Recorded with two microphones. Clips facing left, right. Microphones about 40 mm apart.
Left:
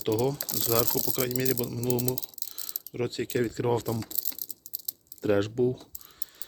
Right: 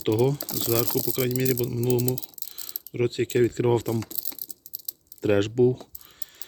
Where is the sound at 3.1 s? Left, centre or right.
Right.